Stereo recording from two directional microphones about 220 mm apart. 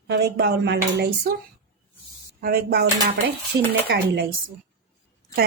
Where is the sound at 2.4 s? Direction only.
45° right (ahead or behind).